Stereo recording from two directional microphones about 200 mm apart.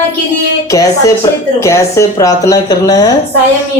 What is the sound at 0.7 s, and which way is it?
Speech, 15° left (ahead or behind).